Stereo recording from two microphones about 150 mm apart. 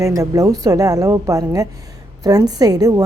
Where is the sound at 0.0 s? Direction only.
20° right (ahead or behind).